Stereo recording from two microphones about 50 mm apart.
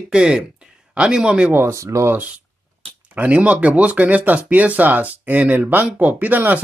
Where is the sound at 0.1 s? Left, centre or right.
Centre.